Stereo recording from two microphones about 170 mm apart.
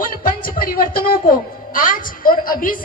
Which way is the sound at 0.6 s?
55° left (ahead or behind).